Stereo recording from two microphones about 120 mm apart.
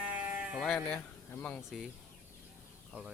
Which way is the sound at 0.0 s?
15° right (ahead or behind).